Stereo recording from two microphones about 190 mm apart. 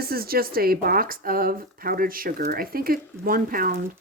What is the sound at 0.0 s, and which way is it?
Speech, 50° right (ahead or behind).